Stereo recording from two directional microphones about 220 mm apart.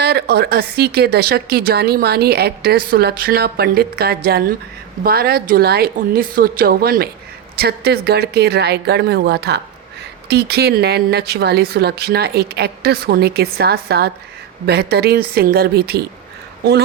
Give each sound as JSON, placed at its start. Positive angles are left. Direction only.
{"t": 0.0, "sound": "speech", "side_deg": -45}